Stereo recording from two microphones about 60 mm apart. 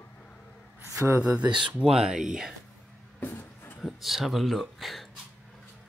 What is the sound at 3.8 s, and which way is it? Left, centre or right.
Speech, centre.